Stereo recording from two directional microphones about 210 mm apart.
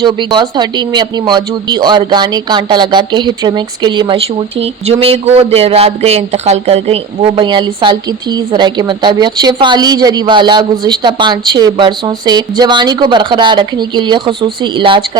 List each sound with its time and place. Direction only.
0.0 s speech: 20° right (ahead or behind)